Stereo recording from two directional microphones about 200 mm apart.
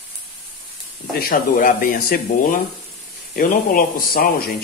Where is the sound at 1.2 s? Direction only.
45° left (ahead or behind).